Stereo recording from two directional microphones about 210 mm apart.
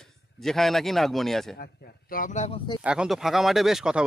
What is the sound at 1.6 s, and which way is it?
A man's voice, 45° left (ahead or behind).